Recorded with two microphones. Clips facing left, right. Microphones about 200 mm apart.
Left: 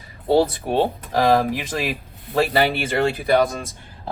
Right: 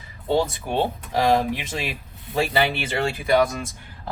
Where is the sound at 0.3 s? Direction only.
35° left (ahead or behind).